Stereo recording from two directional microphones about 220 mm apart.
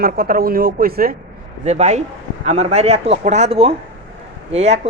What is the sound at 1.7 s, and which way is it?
A man's voice, 30° right (ahead or behind).